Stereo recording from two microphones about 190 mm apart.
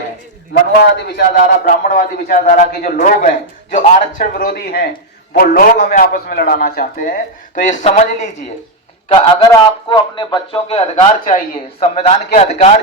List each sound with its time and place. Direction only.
1.0 s a man's voice: 55° left (ahead or behind); by 8.3 s 40° left (ahead or behind)
9.0 s a man's voice: 25° left (ahead or behind)